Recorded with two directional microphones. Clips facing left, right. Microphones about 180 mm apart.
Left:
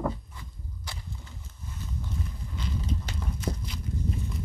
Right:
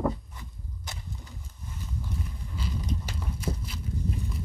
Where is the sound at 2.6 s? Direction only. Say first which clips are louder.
Even; 10° right (ahead or behind).